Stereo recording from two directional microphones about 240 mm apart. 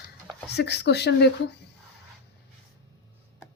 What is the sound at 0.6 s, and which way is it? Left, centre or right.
Speech, left.